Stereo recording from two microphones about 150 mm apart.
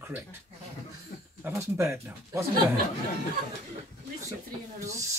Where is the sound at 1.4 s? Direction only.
20° right (ahead or behind).